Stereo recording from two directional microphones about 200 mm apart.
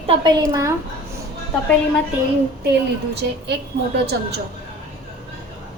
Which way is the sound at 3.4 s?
60° right (ahead or behind).